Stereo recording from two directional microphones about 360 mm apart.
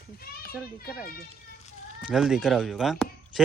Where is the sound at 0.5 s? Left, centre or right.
Centre.